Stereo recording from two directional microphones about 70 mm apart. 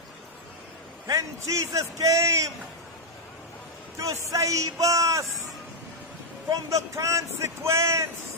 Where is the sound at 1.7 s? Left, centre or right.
Right.